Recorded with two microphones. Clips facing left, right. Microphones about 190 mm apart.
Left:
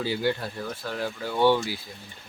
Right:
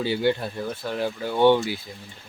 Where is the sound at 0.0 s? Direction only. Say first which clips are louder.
Right 4 dB; 25° right (ahead or behind).